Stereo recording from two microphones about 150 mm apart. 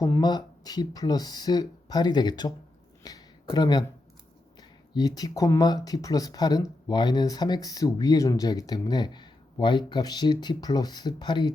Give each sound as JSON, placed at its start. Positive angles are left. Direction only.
{"t": 0.0, "sound": "speech", "side_deg": 25}
{"t": 3.0, "sound": "a sound", "side_deg": 25}
{"t": 4.9, "sound": "speech", "side_deg": 25}